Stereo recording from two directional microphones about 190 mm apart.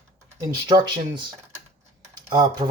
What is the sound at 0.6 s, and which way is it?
Speech, 25° right (ahead or behind).